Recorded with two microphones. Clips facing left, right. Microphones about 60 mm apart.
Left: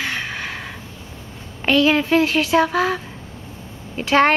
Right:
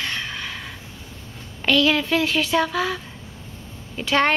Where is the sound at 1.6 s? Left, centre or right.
Left.